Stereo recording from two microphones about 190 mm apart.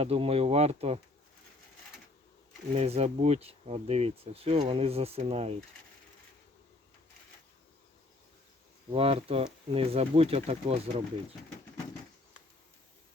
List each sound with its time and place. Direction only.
0.0 s speech: 30° right (ahead or behind)
2.7 s speech: 35° right (ahead or behind)
8.9 s speech: 30° right (ahead or behind)